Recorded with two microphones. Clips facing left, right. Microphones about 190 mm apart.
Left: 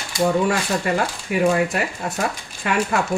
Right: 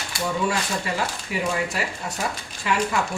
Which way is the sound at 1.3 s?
55° left (ahead or behind).